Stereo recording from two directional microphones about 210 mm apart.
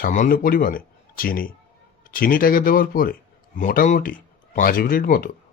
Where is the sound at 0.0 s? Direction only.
40° left (ahead or behind).